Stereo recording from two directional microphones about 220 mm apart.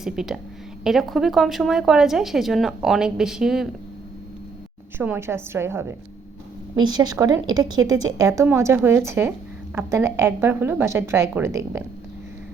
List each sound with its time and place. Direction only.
0.0 s a woman's voice: centre (ahead or behind)
4.9 s a woman's voice: 10° right (ahead or behind)